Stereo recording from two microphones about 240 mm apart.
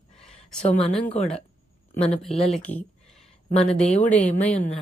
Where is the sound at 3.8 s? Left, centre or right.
Left.